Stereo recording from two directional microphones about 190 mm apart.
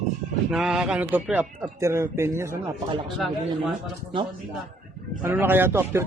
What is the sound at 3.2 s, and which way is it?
Speech, centre (ahead or behind).